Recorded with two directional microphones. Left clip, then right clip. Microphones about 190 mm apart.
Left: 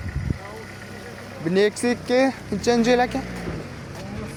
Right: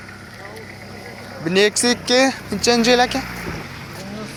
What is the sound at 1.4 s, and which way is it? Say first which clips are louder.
Speech: right 4 dB; centre (ahead or behind).